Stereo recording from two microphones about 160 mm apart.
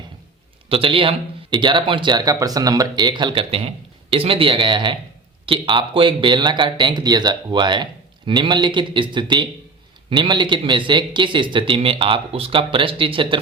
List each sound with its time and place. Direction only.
0.7 s speech: 35° right (ahead or behind)